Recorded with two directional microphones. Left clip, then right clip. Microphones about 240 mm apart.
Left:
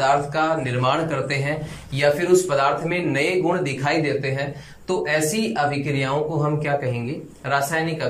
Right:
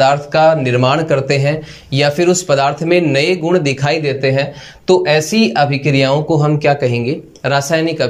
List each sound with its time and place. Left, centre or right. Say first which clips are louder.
0.0 s speech: right 9 dB; right